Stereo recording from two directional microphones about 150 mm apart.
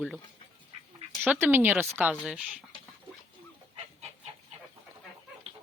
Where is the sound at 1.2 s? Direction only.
10° right (ahead or behind).